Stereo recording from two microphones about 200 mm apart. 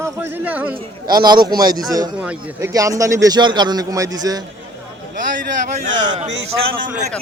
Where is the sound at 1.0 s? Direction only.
20° right (ahead or behind).